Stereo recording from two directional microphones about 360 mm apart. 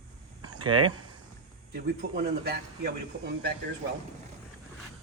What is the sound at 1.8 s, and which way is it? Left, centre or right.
Speech, right.